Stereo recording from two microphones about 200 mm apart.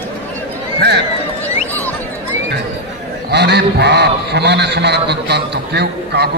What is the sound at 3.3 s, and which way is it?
A man's voice, 55° right (ahead or behind).